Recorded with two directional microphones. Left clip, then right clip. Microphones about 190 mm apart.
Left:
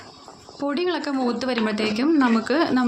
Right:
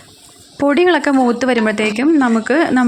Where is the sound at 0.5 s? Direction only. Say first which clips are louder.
Right 12 dB; 40° right (ahead or behind).